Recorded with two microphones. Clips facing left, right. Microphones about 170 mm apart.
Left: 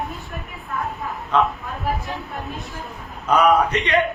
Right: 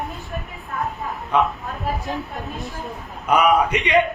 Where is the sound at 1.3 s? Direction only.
10° right (ahead or behind).